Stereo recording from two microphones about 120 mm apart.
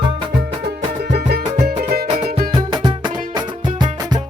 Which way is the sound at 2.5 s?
40° right (ahead or behind).